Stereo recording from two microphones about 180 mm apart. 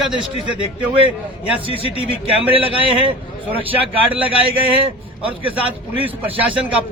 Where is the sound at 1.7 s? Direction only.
30° left (ahead or behind).